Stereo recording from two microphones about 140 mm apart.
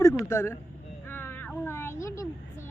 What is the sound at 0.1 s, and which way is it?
Speech, 20° left (ahead or behind).